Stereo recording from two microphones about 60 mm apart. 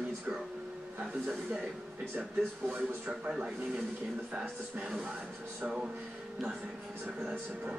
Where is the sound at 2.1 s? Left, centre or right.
Right.